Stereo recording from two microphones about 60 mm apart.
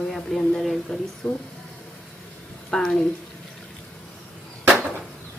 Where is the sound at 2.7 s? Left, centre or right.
Centre.